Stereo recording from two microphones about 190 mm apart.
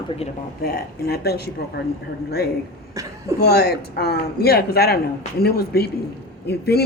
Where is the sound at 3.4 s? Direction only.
55° left (ahead or behind).